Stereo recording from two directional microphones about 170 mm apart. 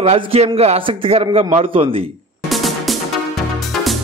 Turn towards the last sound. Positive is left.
turn(degrees=0)  # may be behind; listen again after turning